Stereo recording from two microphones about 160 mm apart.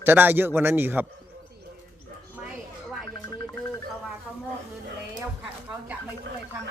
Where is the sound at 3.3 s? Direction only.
25° left (ahead or behind).